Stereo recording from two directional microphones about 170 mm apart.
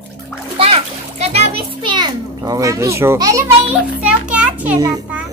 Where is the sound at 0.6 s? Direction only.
35° right (ahead or behind).